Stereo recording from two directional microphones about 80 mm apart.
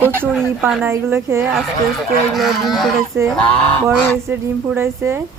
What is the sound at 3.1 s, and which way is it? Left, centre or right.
A woman's voice, right.